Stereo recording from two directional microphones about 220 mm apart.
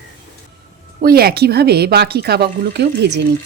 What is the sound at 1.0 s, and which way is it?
A woman's voice, 45° right (ahead or behind).